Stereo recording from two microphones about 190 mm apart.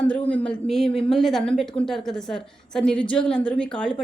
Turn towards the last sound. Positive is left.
turn(degrees=5)  # may be behind; listen again after turning